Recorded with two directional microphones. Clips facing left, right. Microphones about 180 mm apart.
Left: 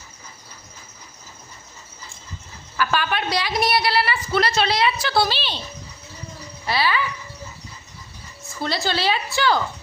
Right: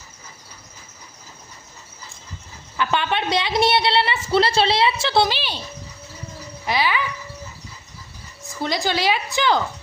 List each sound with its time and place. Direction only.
2.7 s a woman's voice: 20° right (ahead or behind)
6.7 s a woman's voice: 15° right (ahead or behind)
8.4 s a woman's voice: 15° right (ahead or behind)